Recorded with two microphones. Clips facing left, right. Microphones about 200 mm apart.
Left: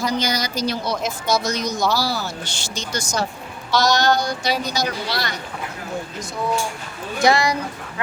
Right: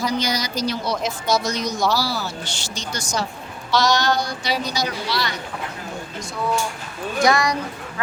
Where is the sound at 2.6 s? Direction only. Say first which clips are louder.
Left 4 dB; 45° left (ahead or behind).